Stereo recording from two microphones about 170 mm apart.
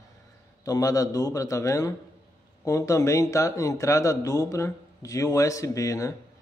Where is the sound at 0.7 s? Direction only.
20° left (ahead or behind).